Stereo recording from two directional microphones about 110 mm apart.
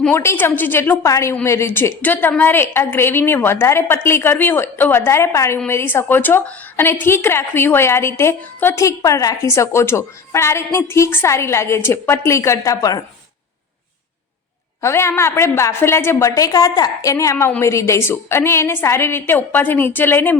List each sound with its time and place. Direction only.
0.1 s a woman's voice: 20° left (ahead or behind)
14.8 s a woman's voice: 25° left (ahead or behind)